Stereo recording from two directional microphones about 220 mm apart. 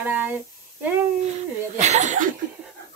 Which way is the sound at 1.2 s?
30° right (ahead or behind).